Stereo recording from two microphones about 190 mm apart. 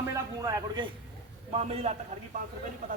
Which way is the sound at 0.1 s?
20° right (ahead or behind).